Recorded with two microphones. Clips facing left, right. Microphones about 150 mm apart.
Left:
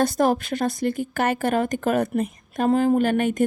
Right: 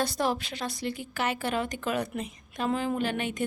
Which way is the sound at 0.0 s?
50° left (ahead or behind).